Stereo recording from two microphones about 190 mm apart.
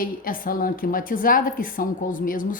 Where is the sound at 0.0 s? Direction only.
50° left (ahead or behind).